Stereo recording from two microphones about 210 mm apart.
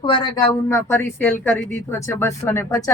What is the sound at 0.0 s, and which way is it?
Speech, 25° left (ahead or behind).